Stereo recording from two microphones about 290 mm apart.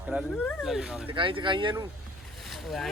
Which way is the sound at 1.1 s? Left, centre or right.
Centre.